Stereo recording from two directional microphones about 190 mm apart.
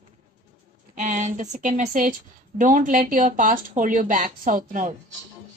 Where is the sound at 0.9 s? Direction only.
40° right (ahead or behind).